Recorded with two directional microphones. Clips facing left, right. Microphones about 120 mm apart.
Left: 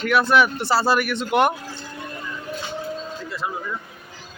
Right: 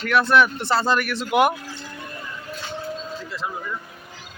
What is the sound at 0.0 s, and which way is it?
Speech, 5° left (ahead or behind).